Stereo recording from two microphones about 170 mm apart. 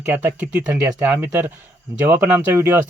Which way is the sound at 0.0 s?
15° right (ahead or behind).